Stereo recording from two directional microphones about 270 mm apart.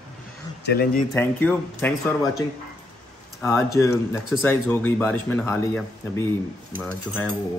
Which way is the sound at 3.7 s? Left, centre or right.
Centre.